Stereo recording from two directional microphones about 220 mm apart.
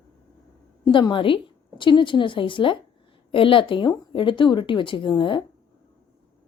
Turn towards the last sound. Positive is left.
turn(degrees=20)  # may be behind; listen again after turning